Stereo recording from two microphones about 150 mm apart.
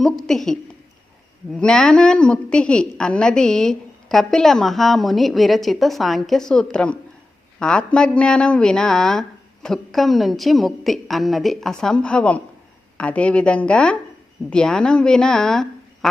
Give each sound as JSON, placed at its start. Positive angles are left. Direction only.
{"t": 0.0, "sound": "a woman's voice", "side_deg": 0}